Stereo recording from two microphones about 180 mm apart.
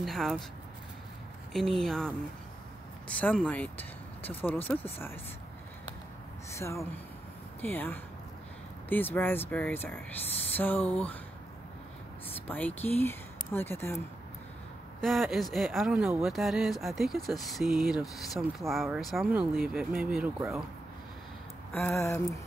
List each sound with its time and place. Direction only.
0.0 s speech: centre (ahead or behind)
1.5 s speech: centre (ahead or behind)
3.2 s speech: 10° left (ahead or behind)
6.5 s speech: 15° left (ahead or behind)
12.4 s speech: 10° left (ahead or behind)
15.0 s speech: centre (ahead or behind)
21.7 s speech: 15° left (ahead or behind)